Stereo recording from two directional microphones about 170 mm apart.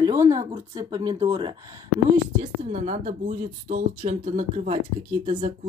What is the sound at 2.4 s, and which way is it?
Speech, 45° right (ahead or behind).